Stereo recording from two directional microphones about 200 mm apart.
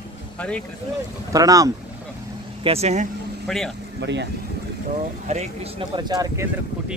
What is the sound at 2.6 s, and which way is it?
Speech, 30° right (ahead or behind).